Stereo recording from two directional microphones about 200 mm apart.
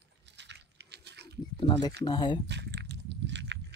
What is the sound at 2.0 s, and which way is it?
Speech, 25° left (ahead or behind).